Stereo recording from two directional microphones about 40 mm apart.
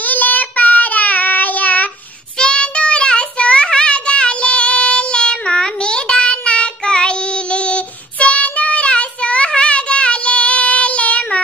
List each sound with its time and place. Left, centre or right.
0.0 s child singing: left
2.3 s child singing: left